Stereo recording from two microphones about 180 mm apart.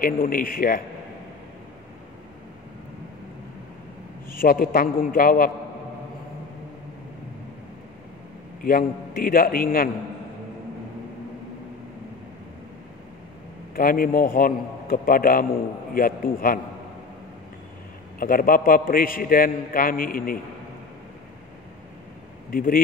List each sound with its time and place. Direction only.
0.0 s a man's voice: 55° left (ahead or behind)
4.4 s a man's voice: 55° left (ahead or behind)
8.6 s a man's voice: 55° left (ahead or behind)
13.7 s a man's voice: 50° left (ahead or behind)
18.2 s a man's voice: 50° left (ahead or behind)
22.5 s speech: 50° left (ahead or behind)